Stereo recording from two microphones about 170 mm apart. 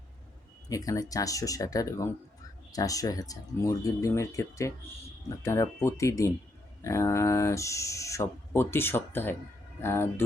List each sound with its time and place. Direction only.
0.7 s speech: 20° left (ahead or behind)